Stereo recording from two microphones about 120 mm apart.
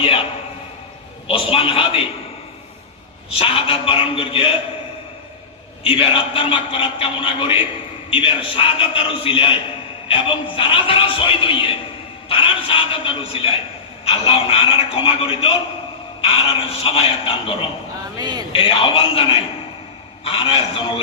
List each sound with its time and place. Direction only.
0.0 s a sound: 50° left (ahead or behind)
1.3 s a man's voice: 50° left (ahead or behind)
3.3 s a man's voice: 50° left (ahead or behind)
5.8 s a man's voice: 50° left (ahead or behind)
18.2 s a man's voice: 35° right (ahead or behind)
18.5 s a man's voice: 50° left (ahead or behind)